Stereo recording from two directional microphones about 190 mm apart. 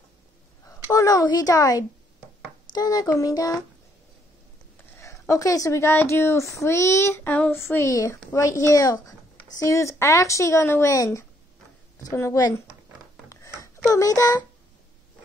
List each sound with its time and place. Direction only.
0.7 s a child's voice: 15° left (ahead or behind)
2.7 s child singing: 20° left (ahead or behind)
4.9 s speech: 15° left (ahead or behind)
12.0 s child singing: 15° left (ahead or behind)
13.3 s a sound: 15° left (ahead or behind)
13.9 s speech: 20° left (ahead or behind)